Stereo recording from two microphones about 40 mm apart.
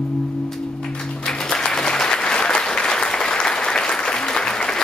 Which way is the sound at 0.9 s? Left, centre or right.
Left.